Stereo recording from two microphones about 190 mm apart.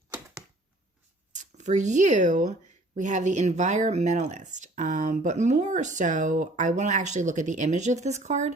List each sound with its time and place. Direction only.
1.3 s speech: 40° right (ahead or behind)